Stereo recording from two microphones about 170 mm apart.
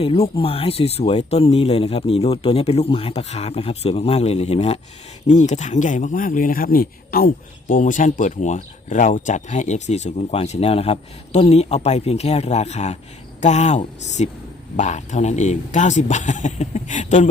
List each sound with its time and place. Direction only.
0.0 s a man's voice: 35° left (ahead or behind)